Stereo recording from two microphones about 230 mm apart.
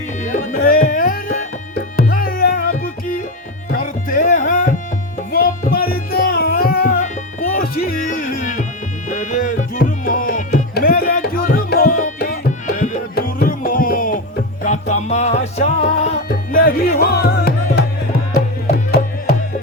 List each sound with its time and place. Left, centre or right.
0.2 s music: left
18.9 s music: left